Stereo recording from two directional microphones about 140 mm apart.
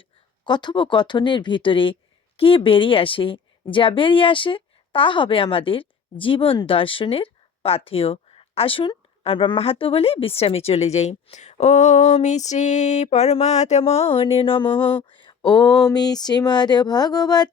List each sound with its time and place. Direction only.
0.4 s a woman's voice: 35° left (ahead or behind)